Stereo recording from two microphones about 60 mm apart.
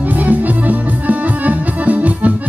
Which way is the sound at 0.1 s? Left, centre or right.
Right.